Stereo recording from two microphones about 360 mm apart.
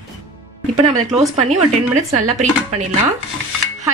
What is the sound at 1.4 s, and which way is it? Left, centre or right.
Speech, centre.